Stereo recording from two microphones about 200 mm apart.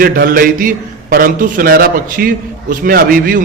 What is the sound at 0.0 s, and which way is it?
A man's voice, 45° right (ahead or behind).